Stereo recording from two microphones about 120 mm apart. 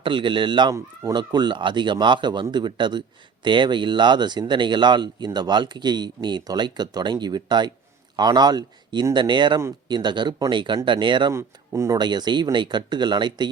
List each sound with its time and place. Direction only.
0.0 s speech: 40° right (ahead or behind)
11.3 s speech: 25° right (ahead or behind)
11.9 s speech: 40° right (ahead or behind)